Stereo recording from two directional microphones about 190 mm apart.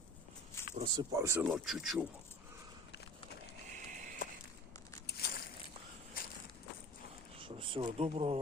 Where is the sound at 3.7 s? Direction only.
40° right (ahead or behind).